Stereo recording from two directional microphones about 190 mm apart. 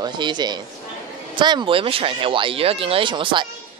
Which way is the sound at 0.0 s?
25° right (ahead or behind).